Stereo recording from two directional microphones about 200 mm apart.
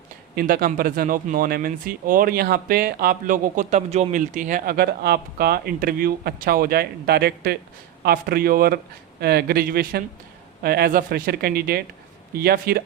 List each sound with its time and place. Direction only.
0.3 s speech: 50° right (ahead or behind)